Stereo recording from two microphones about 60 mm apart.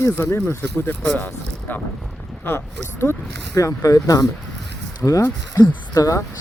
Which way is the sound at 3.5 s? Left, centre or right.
Left.